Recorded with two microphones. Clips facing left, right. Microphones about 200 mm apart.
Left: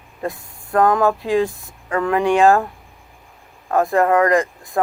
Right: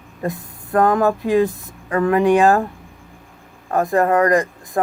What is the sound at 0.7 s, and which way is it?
Music, 40° right (ahead or behind).